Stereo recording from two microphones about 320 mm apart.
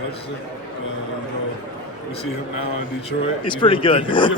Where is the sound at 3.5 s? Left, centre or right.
Centre.